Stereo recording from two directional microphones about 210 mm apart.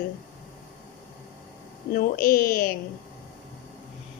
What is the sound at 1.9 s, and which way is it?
Speech, 40° left (ahead or behind).